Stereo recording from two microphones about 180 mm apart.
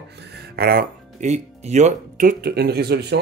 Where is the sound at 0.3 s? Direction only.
55° right (ahead or behind).